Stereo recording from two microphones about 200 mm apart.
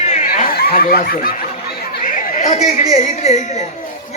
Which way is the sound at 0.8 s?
50° left (ahead or behind).